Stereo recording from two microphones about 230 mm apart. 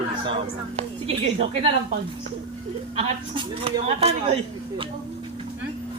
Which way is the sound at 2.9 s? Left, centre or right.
Right.